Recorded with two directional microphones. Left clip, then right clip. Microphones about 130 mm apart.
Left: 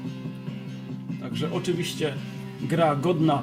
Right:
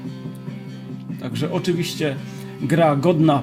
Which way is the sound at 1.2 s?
90° right.